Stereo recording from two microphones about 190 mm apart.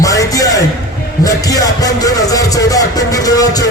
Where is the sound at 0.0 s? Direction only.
15° left (ahead or behind).